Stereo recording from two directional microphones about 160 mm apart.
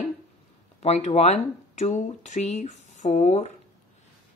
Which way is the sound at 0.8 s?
40° left (ahead or behind).